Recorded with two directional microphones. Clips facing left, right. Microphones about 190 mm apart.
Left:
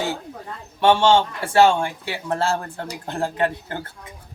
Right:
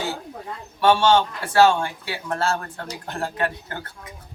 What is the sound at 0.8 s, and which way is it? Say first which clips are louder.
A man's voice: left 1 dB; 25° left (ahead or behind).